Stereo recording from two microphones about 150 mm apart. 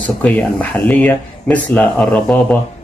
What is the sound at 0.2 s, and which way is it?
Speech, 5° left (ahead or behind).